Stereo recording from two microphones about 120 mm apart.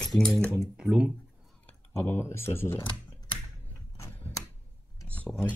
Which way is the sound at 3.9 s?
25° left (ahead or behind).